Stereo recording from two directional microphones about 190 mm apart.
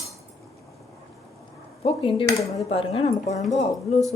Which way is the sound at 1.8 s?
30° left (ahead or behind).